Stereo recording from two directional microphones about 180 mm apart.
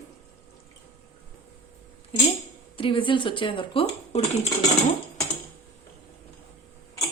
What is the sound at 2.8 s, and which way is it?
Speech, 30° left (ahead or behind).